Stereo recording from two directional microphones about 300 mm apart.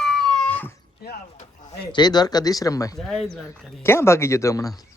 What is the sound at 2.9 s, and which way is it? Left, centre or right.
Speech, centre.